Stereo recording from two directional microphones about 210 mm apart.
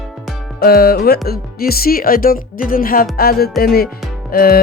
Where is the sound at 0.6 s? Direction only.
50° left (ahead or behind).